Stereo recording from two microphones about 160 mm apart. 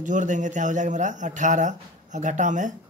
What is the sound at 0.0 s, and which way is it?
Speech, 50° right (ahead or behind).